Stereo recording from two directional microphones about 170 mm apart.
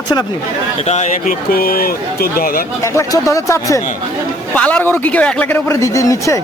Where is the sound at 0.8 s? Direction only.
45° left (ahead or behind).